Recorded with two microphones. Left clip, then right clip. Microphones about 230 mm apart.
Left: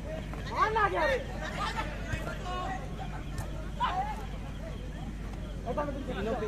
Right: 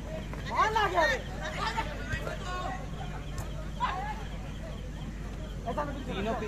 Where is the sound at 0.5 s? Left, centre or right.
Right.